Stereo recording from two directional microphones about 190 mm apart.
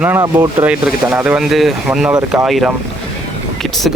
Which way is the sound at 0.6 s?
5° right (ahead or behind).